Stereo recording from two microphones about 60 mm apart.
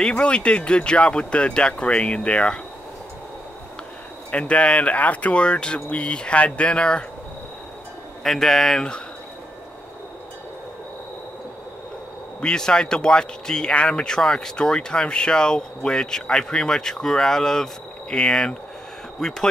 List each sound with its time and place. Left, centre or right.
0.0 s speech: centre
4.3 s speech: centre
8.2 s speech: centre
12.4 s speech: centre